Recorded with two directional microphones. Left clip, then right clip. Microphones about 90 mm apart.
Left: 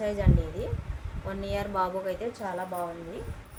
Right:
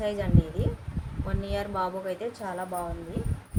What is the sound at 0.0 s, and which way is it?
Speech, 20° right (ahead or behind).